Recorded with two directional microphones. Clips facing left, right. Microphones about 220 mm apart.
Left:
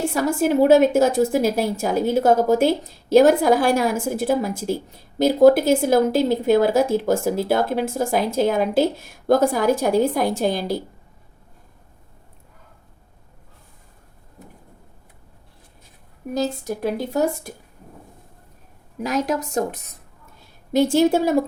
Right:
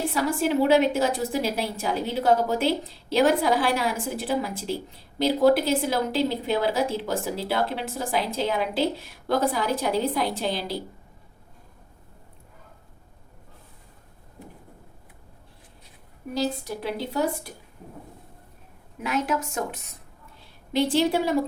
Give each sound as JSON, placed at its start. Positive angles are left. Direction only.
{"t": 0.1, "sound": "speech", "side_deg": 45}
{"t": 16.3, "sound": "speech", "side_deg": 45}
{"t": 18.9, "sound": "a woman's voice", "side_deg": 40}
{"t": 20.7, "sound": "speech", "side_deg": 45}